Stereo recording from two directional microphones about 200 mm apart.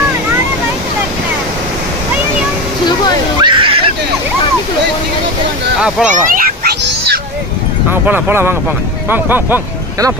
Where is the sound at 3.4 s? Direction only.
25° right (ahead or behind).